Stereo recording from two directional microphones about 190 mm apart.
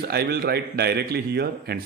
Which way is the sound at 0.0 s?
55° right (ahead or behind).